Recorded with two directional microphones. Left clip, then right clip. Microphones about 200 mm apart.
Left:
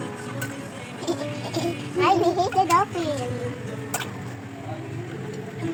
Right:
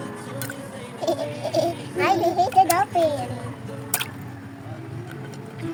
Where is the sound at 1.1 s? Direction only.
15° right (ahead or behind).